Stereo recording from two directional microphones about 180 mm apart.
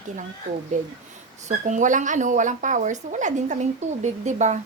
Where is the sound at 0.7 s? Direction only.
45° right (ahead or behind).